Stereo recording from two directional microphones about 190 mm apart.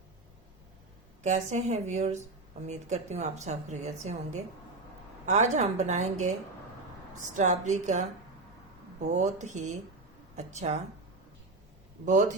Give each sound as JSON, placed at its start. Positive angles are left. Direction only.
{"t": 1.2, "sound": "a woman's voice", "side_deg": -40}
{"t": 7.3, "sound": "a woman's voice", "side_deg": -40}
{"t": 12.0, "sound": "a woman's voice", "side_deg": -40}